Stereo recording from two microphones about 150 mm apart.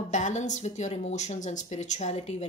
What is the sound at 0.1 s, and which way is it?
Speech, 55° left (ahead or behind).